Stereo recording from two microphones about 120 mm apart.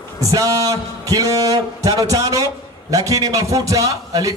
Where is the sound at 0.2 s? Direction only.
30° right (ahead or behind).